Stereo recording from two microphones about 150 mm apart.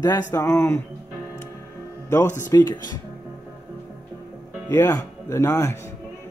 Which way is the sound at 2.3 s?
25° left (ahead or behind).